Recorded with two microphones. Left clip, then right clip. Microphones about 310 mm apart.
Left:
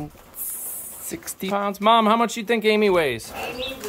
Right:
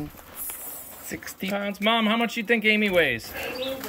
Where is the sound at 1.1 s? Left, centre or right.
Centre.